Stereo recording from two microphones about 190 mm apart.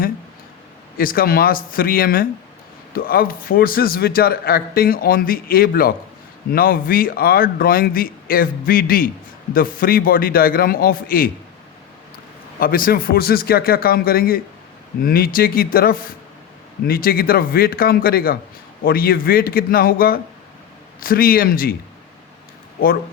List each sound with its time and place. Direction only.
0.9 s a man's voice: 50° left (ahead or behind)
12.5 s a man's voice: 50° left (ahead or behind)